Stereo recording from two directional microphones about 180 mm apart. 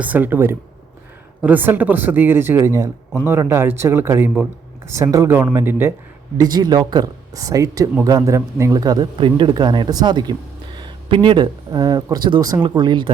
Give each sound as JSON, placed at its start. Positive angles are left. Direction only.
{"t": 0.0, "sound": "speech", "side_deg": -10}